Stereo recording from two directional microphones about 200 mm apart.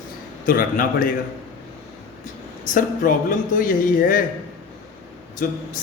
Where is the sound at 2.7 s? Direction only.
45° left (ahead or behind).